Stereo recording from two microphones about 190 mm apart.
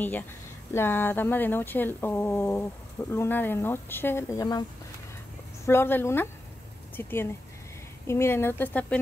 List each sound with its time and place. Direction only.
0.7 s speech: 10° left (ahead or behind)
5.7 s speech: 10° left (ahead or behind)